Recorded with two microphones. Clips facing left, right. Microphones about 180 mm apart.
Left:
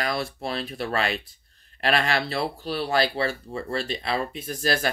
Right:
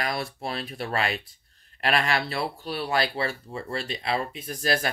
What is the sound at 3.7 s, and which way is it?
Speech, 35° left (ahead or behind).